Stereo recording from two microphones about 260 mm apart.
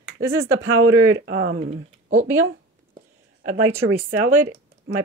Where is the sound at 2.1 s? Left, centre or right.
Centre.